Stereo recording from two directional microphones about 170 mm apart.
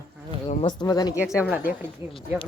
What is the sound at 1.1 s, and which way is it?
Speech, 5° right (ahead or behind).